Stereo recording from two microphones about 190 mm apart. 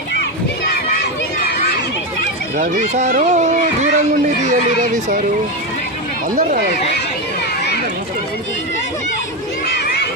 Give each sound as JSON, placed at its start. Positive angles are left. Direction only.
{"t": 2.6, "sound": "speech", "side_deg": -35}